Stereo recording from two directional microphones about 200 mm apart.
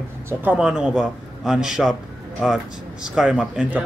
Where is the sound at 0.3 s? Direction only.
10° right (ahead or behind).